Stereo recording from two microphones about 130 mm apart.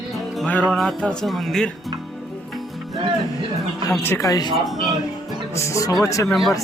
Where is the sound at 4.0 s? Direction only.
20° left (ahead or behind).